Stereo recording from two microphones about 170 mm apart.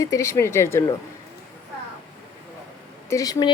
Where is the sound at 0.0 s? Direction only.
20° left (ahead or behind).